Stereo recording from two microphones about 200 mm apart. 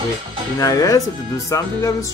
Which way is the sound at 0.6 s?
15° left (ahead or behind).